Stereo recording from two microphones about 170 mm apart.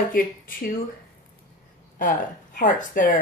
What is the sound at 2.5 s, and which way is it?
Speech, 55° left (ahead or behind).